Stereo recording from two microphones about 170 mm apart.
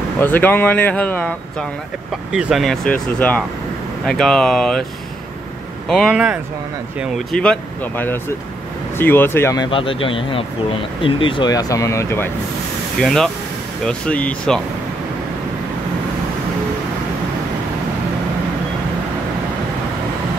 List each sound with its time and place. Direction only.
0.2 s speech: 10° left (ahead or behind)
2.3 s speech: 5° right (ahead or behind)
5.9 s speech: centre (ahead or behind)
7.3 s speech: 10° left (ahead or behind)
9.7 s speech: 30° left (ahead or behind); by 12.3 s 15° left (ahead or behind)
13.0 s speech: 5° left (ahead or behind)